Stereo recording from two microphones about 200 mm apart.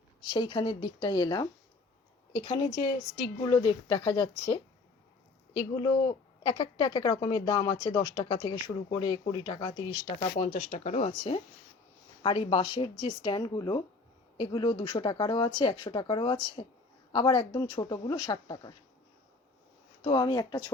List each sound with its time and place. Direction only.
0.3 s a woman's voice: 20° left (ahead or behind)
10.3 s a woman's voice: 35° left (ahead or behind)
20.0 s a woman's voice: 25° left (ahead or behind)